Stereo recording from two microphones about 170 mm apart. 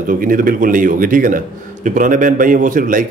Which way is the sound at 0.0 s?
55° right (ahead or behind).